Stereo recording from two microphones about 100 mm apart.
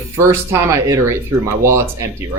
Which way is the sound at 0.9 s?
30° right (ahead or behind).